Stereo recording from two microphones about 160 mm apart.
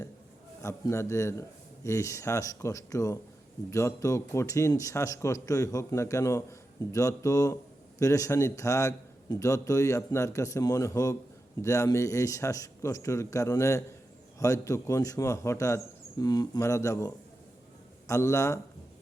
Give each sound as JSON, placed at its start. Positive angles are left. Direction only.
{"t": 0.6, "sound": "a man's voice", "side_deg": 15}